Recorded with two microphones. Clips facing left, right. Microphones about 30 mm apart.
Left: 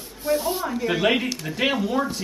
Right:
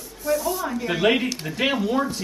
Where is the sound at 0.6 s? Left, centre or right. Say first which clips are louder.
Right 1 dB; centre.